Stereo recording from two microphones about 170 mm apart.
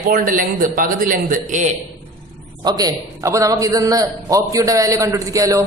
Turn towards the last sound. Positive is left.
turn(degrees=-20)  # may be behind; listen again after turning